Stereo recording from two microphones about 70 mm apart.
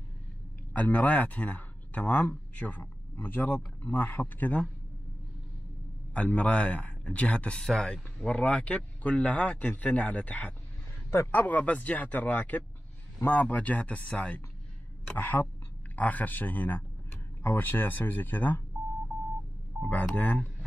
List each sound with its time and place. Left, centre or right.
0.7 s speech: left
6.1 s speech: centre
11.1 s a man's voice: left
11.4 s speech: left
19.8 s speech: left